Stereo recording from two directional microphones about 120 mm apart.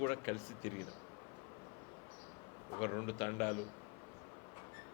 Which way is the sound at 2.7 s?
25° left (ahead or behind).